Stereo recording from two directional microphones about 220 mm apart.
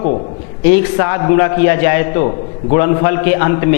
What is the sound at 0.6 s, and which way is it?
A man's voice, 10° left (ahead or behind).